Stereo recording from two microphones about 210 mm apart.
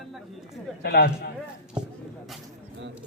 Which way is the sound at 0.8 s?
50° left (ahead or behind).